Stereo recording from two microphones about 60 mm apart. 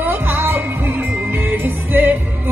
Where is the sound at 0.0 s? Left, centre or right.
Right.